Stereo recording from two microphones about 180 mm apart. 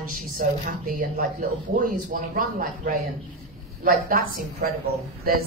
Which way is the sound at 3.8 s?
55° right (ahead or behind).